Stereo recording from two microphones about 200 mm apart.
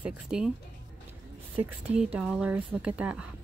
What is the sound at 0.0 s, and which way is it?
Speech, 5° right (ahead or behind).